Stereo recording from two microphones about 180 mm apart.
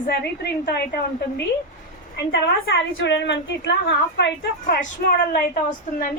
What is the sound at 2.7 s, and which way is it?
A woman's voice, 80° left.